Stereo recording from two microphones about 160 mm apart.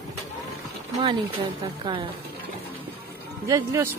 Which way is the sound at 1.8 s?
30° right (ahead or behind).